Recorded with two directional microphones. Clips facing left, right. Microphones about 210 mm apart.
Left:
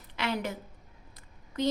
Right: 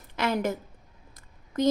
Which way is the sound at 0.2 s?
45° right (ahead or behind).